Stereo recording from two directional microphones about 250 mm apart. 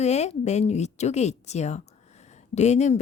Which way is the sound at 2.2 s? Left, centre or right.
Left.